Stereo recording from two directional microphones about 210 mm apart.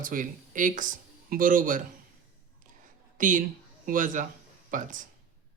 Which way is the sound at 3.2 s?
40° right (ahead or behind).